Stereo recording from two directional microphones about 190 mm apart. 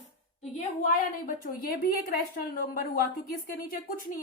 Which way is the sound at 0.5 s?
45° left (ahead or behind).